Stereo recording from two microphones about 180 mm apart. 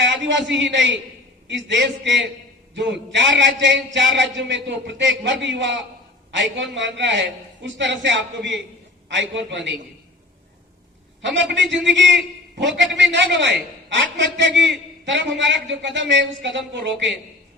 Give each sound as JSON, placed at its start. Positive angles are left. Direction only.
{"t": 0.0, "sound": "a man's voice", "side_deg": -85}
{"t": 11.2, "sound": "a man's voice", "side_deg": -85}